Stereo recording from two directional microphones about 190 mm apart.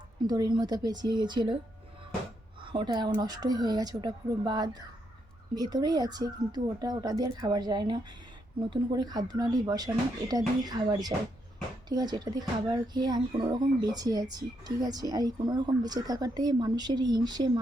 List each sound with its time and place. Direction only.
0.2 s speech: 20° right (ahead or behind)
2.6 s speech: 25° right (ahead or behind)